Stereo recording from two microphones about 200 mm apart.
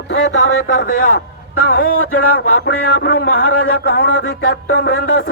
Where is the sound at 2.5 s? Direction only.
50° left (ahead or behind).